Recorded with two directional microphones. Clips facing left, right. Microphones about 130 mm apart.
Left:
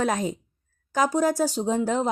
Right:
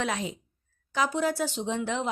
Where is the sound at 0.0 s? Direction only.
45° left (ahead or behind).